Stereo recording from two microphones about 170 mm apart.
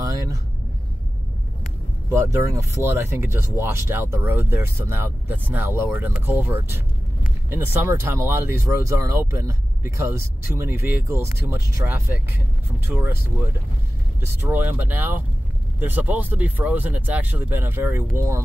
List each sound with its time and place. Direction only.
0.0 s vehicle: 20° right (ahead or behind)
2.0 s speech: 20° right (ahead or behind)
14.4 s speech: 10° right (ahead or behind)